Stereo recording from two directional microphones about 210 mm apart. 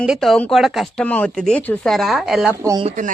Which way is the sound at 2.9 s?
35° right (ahead or behind).